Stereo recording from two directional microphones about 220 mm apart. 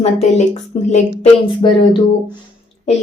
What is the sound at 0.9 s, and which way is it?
Speech, 30° left (ahead or behind).